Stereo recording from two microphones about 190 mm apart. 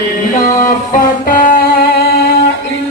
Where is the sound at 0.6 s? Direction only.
45° left (ahead or behind).